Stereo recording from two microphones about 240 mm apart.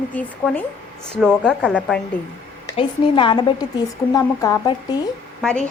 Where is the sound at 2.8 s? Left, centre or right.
Left.